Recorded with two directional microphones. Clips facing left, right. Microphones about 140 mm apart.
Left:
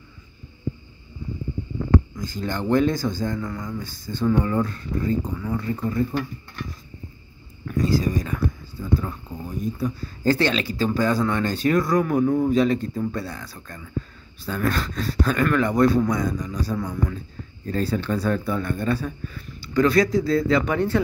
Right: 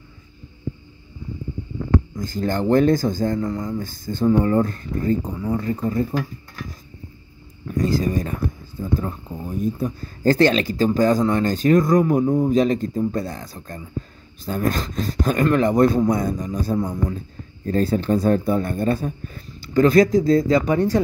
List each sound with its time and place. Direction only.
2.1 s speech: 45° right (ahead or behind)
5.3 s speech: 25° right (ahead or behind)
7.7 s speech: 45° right (ahead or behind)
12.0 s speech: 20° right (ahead or behind)
12.4 s speech: 40° right (ahead or behind)
16.7 s speech: 25° right (ahead or behind)
17.6 s speech: 45° right (ahead or behind)